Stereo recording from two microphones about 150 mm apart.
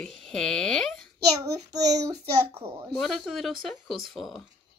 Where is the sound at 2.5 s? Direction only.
40° right (ahead or behind).